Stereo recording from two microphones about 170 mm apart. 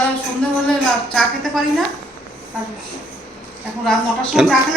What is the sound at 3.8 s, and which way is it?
Speech, centre (ahead or behind).